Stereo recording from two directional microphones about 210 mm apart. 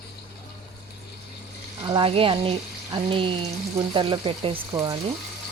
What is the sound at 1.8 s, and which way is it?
A woman's voice, 25° right (ahead or behind).